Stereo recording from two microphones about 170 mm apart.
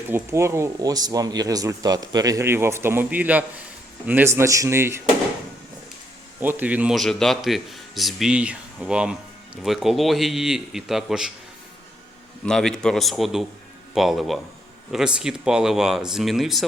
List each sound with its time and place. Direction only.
0.1 s speech: 15° right (ahead or behind)
6.4 s speech: 10° right (ahead or behind)
12.5 s speech: 5° left (ahead or behind)